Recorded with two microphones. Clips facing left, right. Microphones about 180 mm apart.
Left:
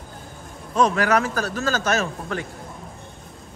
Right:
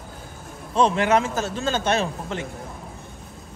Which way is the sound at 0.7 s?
25° right (ahead or behind).